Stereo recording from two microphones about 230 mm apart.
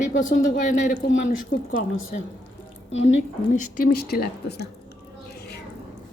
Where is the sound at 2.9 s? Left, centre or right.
Left.